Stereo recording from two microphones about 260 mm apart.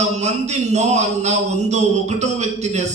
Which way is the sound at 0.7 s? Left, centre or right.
Right.